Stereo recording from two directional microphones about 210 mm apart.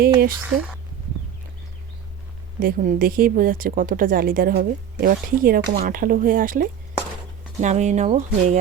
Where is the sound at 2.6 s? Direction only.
45° right (ahead or behind).